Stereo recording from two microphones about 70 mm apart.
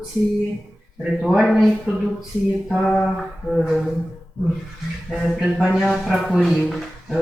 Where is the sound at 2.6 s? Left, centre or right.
Centre.